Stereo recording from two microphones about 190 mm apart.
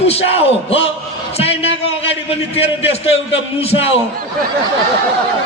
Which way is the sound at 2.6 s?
30° left (ahead or behind).